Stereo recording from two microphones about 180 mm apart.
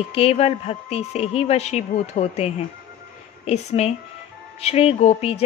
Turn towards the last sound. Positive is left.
turn(degrees=35)  # may be behind; listen again after turning